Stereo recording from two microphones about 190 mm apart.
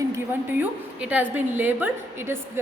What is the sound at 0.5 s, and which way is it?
A woman's voice, 10° right (ahead or behind).